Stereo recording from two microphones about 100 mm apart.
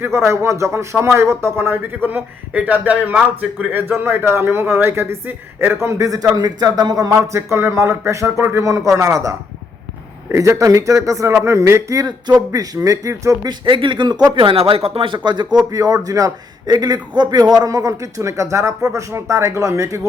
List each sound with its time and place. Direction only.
0.3 s a man's voice: 30° right (ahead or behind)
13.5 s speech: 50° right (ahead or behind); by 20.0 s 30° right (ahead or behind)